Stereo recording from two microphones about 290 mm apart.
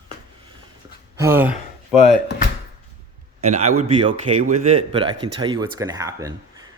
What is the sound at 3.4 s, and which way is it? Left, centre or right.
Speech, right.